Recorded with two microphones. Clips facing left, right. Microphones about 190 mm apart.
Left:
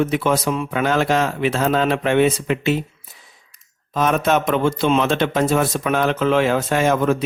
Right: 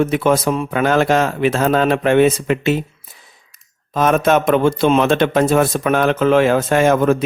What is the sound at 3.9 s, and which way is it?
A man's voice, 50° right (ahead or behind).